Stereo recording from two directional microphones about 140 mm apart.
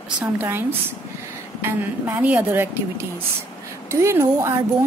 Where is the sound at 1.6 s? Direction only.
10° right (ahead or behind).